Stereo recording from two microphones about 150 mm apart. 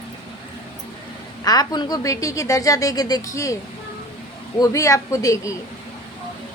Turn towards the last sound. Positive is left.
turn(degrees=20)  # may be behind; listen again after turning